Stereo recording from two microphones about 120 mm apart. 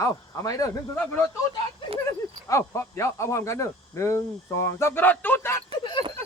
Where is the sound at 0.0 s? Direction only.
30° left (ahead or behind).